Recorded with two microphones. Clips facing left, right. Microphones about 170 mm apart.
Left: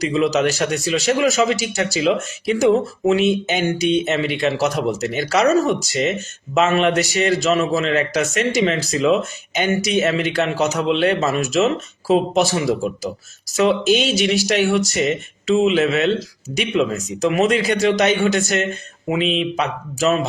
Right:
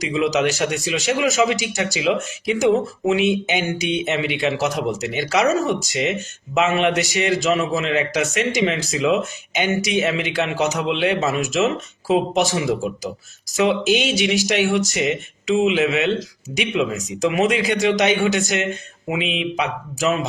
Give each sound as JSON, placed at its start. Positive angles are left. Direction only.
{"t": 0.0, "sound": "speech", "side_deg": -15}